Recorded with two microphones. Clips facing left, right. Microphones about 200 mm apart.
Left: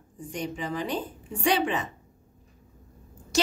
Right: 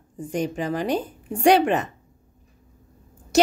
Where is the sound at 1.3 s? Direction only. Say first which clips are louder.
Right 8 dB; 65° right (ahead or behind).